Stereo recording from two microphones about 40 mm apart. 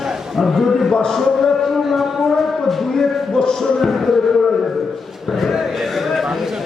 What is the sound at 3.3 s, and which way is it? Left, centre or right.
Music, centre.